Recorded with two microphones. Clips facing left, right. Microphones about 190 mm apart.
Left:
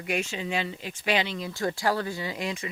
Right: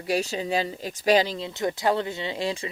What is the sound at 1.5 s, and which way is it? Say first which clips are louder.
Speech: right 3 dB; 20° right (ahead or behind).